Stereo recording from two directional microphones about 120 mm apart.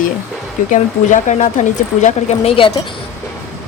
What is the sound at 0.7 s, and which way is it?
Speech, 90° left.